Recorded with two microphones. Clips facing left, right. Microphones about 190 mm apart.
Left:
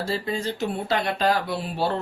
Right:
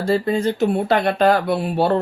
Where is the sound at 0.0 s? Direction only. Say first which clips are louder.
Right 8 dB; 55° right (ahead or behind).